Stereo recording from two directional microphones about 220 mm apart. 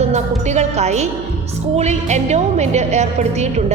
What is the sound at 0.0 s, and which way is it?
A woman's voice, 30° right (ahead or behind).